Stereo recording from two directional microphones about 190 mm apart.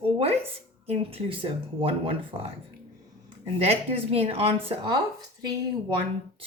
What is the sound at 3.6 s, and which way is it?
Speech, 30° right (ahead or behind).